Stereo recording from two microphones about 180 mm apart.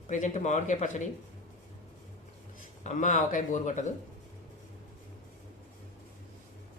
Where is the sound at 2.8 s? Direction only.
45° left (ahead or behind).